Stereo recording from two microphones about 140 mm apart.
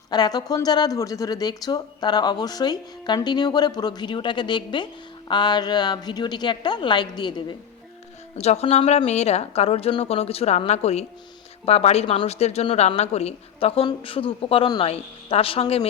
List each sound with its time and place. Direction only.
0.1 s a woman's voice: 30° left (ahead or behind)
8.4 s speech: 50° left (ahead or behind)